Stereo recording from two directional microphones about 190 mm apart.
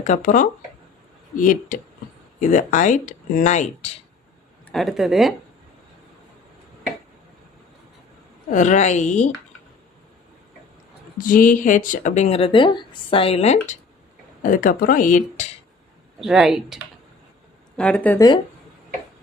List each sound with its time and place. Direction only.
0.0 s speech: 40° left (ahead or behind)
4.7 s speech: centre (ahead or behind)
8.4 s speech: 40° left (ahead or behind)
11.2 s speech: 45° left (ahead or behind)
16.2 s speech: centre (ahead or behind)